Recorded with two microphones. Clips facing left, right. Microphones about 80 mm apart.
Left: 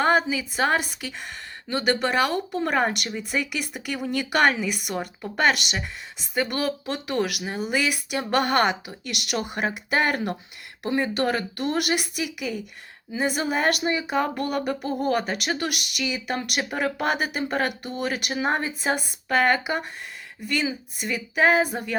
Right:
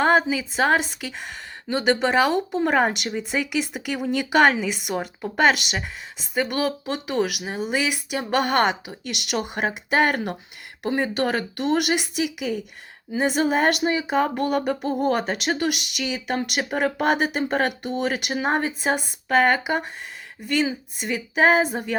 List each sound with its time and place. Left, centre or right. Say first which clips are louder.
0.0 s a woman's voice: right 2 dB; centre
6.6 s a woman's voice: right 2 dB; right
13.4 s a woman's voice: right 4 dB; right